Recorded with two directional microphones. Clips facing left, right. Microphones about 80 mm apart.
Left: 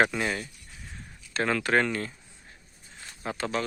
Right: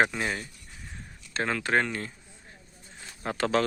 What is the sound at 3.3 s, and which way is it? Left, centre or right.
Speech, right.